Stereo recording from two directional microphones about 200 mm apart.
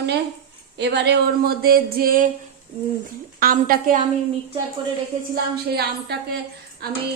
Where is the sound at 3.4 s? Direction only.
45° right (ahead or behind).